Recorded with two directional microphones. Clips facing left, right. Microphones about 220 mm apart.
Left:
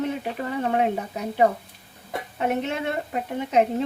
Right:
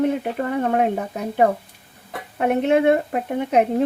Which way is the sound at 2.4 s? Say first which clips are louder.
Right 8 dB; 55° right (ahead or behind).